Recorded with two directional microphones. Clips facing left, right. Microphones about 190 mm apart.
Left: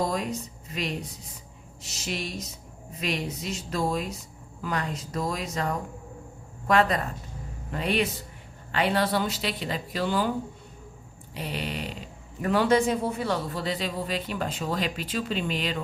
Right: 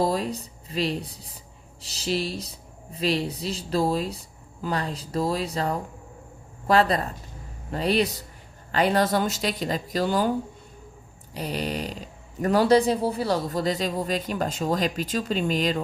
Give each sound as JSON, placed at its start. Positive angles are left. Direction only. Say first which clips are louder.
{"t": 0.0, "sound": "speech", "louder": "right 3 dB", "side_deg": -35}
{"t": 11.3, "sound": "speech", "louder": "right 4 dB", "side_deg": -40}